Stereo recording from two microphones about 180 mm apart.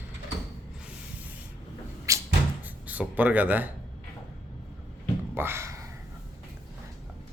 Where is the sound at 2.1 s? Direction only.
15° right (ahead or behind).